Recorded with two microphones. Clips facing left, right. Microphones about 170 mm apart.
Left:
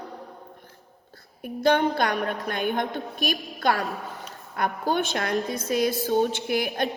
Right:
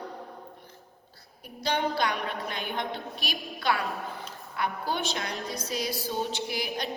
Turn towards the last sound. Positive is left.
turn(degrees=55)  # may be behind; listen again after turning